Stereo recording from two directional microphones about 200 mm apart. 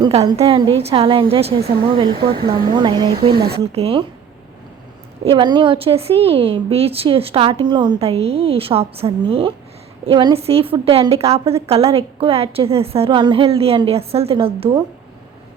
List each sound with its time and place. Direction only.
0.0 s a woman's voice: 20° right (ahead or behind)
5.2 s a woman's voice: 25° right (ahead or behind)